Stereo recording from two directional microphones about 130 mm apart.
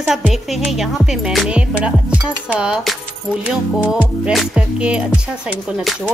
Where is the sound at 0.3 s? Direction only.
Centre (ahead or behind).